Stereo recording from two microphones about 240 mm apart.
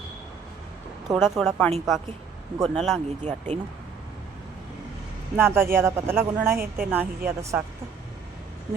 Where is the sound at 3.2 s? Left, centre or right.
Right.